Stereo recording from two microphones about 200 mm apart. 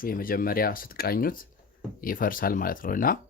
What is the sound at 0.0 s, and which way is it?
Speech, 45° left (ahead or behind).